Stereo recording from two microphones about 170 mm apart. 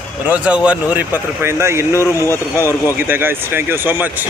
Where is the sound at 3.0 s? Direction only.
10° right (ahead or behind).